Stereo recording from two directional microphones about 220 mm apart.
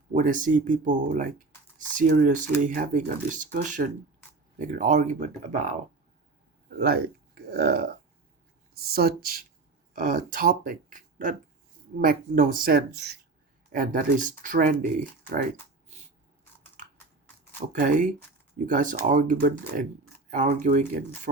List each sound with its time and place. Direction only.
0.1 s speech: 35° right (ahead or behind)
15.9 s a sound: 30° right (ahead or behind)
17.6 s speech: 35° right (ahead or behind)